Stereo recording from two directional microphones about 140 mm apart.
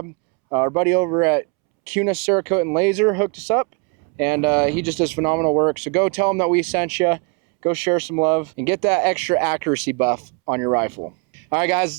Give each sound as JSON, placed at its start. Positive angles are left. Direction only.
{"t": 0.5, "sound": "speech", "side_deg": -20}